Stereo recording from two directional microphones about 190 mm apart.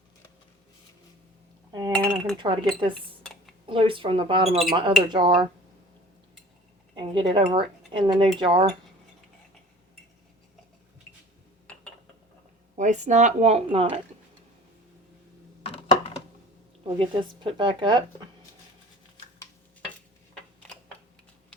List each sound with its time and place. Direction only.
2.0 s speech: 25° right (ahead or behind)
3.7 s a woman's voice: 25° right (ahead or behind)
6.9 s a woman's voice: 25° right (ahead or behind)
12.7 s speech: 40° right (ahead or behind)
15.6 s a sound: 30° left (ahead or behind)
17.0 s a woman's voice: 25° right (ahead or behind)